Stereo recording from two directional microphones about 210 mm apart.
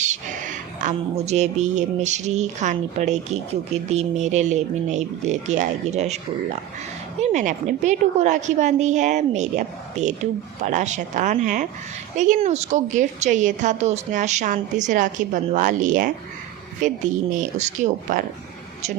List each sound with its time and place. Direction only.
0.0 s speech: 35° right (ahead or behind)
7.2 s speech: 35° right (ahead or behind)